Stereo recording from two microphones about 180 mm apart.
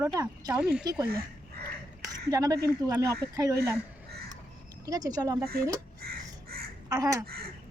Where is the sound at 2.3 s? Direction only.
20° right (ahead or behind).